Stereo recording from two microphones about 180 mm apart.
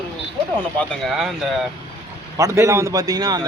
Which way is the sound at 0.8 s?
5° left (ahead or behind).